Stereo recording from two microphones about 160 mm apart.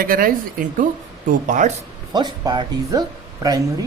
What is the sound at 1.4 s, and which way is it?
Speech, 55° right (ahead or behind).